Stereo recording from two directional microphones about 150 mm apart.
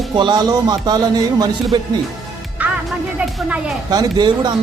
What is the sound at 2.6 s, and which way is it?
Music, 10° right (ahead or behind).